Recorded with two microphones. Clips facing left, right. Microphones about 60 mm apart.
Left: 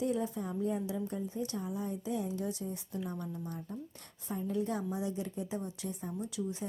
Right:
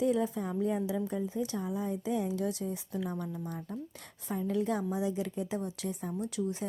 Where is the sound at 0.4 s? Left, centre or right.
Right.